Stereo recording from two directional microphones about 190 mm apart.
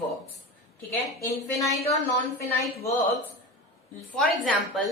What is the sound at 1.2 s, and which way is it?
Speech, 15° left (ahead or behind).